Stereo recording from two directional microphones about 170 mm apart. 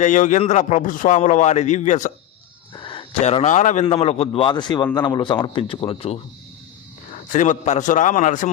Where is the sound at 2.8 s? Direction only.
30° left (ahead or behind).